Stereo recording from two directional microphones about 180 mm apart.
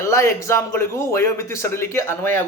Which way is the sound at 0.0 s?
15° left (ahead or behind).